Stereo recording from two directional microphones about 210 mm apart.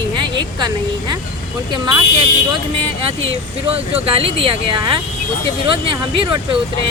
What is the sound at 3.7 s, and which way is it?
Speech, 30° right (ahead or behind).